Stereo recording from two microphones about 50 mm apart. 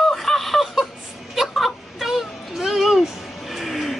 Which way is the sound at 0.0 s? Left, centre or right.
Centre.